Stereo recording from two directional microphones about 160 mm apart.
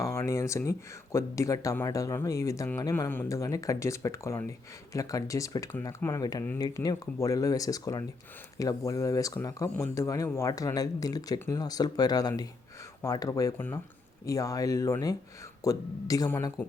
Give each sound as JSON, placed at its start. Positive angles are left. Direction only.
{"t": 0.0, "sound": "speech", "side_deg": 20}